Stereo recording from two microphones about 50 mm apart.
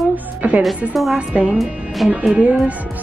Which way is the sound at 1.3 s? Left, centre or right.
Right.